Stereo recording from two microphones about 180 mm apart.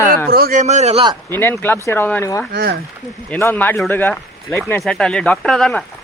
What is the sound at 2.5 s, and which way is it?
Speech, 65° right (ahead or behind).